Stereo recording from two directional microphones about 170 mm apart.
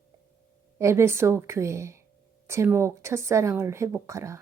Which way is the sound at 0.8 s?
15° right (ahead or behind).